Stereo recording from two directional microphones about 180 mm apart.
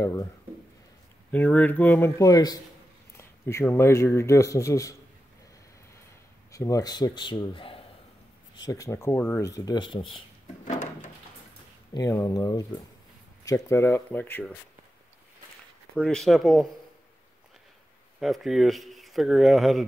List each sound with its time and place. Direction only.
0.0 s speech: 15° left (ahead or behind)
1.3 s speech: 10° left (ahead or behind)
6.5 s speech: 20° left (ahead or behind)
8.5 s speech: 20° left (ahead or behind)
10.6 s drawer open or close: 45° left (ahead or behind)
11.9 s speech: 20° left (ahead or behind)
16.0 s speech: 5° left (ahead or behind)
18.2 s speech: centre (ahead or behind)